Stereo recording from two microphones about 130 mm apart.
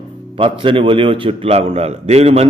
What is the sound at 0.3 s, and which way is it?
A man's voice, 45° right (ahead or behind).